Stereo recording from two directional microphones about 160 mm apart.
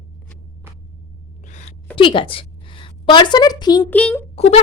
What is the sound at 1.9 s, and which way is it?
A woman's voice, 30° left (ahead or behind).